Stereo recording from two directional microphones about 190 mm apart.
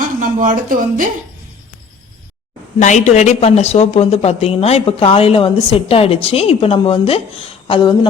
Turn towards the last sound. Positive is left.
turn(degrees=25)  # may be behind; listen again after turning